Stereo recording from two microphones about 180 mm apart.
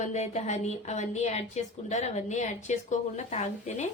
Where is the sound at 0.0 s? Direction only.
40° left (ahead or behind).